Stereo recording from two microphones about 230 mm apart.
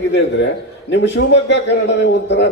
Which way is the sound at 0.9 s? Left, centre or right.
Left.